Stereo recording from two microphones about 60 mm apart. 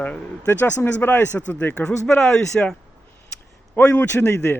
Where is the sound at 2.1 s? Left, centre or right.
Centre.